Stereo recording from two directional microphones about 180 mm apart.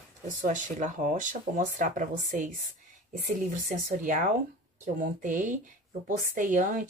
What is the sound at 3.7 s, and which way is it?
Speech, 45° right (ahead or behind).